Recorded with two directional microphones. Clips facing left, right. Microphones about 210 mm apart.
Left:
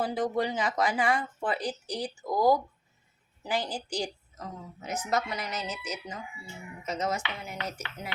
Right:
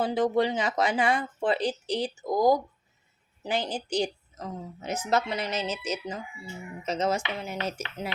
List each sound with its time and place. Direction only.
0.0 s a woman's voice: 25° right (ahead or behind)